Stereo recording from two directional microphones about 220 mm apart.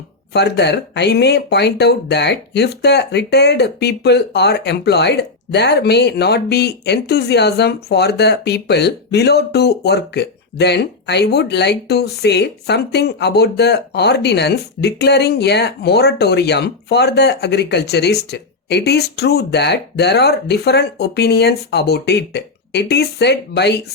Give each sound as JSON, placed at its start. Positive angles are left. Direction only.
{"t": 0.3, "sound": "speech", "side_deg": 50}